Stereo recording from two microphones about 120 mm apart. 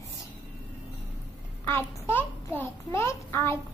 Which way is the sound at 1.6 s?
20° left (ahead or behind).